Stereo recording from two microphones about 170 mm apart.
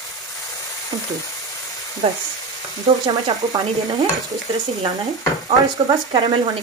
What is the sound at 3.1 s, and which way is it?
Speech, 25° right (ahead or behind).